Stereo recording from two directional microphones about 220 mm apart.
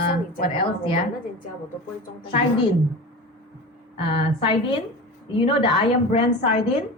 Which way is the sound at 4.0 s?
25° left (ahead or behind).